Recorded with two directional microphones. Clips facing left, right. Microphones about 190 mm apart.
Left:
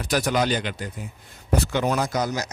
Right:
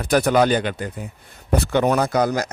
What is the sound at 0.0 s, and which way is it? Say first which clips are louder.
Speech: right 6 dB; 55° right (ahead or behind).